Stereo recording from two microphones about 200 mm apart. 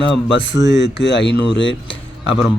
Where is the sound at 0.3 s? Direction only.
60° left (ahead or behind).